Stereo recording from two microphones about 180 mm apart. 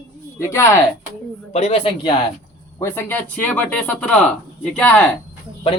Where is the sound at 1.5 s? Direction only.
35° left (ahead or behind).